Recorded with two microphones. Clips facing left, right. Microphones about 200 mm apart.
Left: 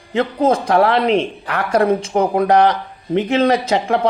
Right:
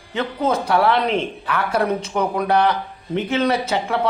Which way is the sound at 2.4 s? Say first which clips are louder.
Left 5 dB; 90° left.